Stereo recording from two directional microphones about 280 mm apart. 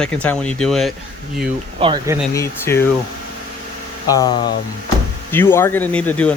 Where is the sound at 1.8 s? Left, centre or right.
Centre.